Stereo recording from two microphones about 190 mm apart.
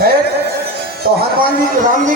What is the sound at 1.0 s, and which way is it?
Speech, 55° right (ahead or behind).